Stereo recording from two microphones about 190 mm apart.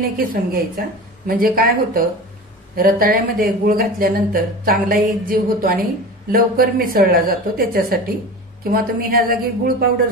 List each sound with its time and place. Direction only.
0.3 s a woman's voice: 50° right (ahead or behind)